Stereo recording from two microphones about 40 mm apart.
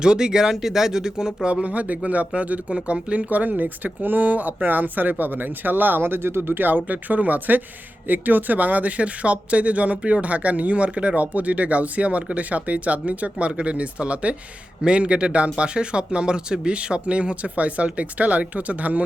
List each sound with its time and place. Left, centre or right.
0.0 s speech: centre
1.6 s speech: right
3.2 s speech: right